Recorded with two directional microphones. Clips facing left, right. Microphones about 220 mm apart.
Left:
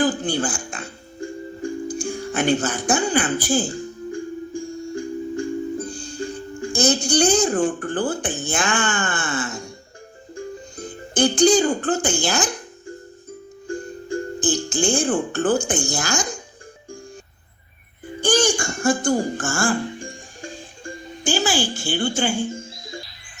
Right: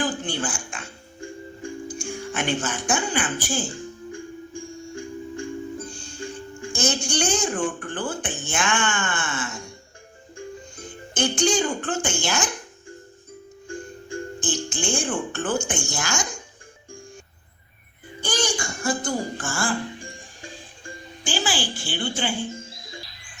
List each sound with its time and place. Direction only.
0.0 s music: 35° left (ahead or behind)
10.3 s speech: 35° left (ahead or behind)
13.7 s speech: 35° left (ahead or behind)
18.2 s music: 45° left (ahead or behind)